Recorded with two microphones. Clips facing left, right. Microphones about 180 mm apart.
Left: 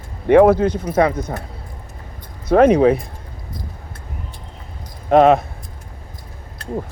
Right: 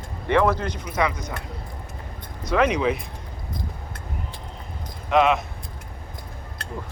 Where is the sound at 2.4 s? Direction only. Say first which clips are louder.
Left 9 dB; 50° left (ahead or behind).